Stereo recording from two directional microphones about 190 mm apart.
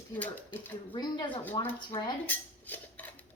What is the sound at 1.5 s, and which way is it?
Speech, 25° left (ahead or behind).